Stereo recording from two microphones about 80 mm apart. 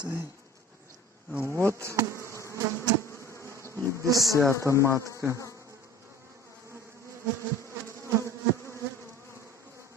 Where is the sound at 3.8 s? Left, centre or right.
Right.